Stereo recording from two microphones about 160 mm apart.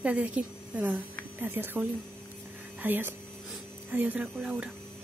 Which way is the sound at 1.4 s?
10° right (ahead or behind).